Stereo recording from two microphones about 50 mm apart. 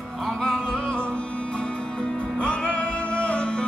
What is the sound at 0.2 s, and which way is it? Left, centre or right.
Music, centre.